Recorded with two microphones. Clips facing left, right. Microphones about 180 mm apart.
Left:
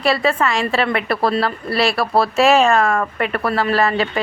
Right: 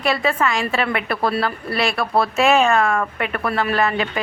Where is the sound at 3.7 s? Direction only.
30° left (ahead or behind).